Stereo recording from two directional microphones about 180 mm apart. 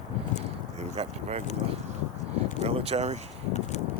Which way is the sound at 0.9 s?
35° right (ahead or behind).